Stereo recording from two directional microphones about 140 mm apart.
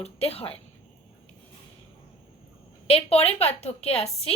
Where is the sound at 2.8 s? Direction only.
45° left (ahead or behind).